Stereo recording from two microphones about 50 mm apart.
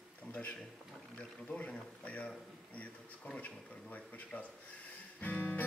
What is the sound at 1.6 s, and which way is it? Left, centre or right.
Speech, left.